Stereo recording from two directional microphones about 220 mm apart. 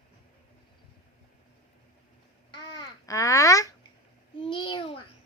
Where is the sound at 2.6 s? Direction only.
20° left (ahead or behind).